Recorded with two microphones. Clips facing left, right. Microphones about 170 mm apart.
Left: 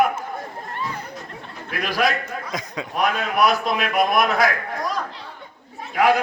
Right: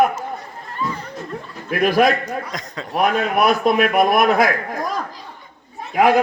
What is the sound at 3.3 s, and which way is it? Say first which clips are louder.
A man's voice: right 3 dB; 50° right (ahead or behind).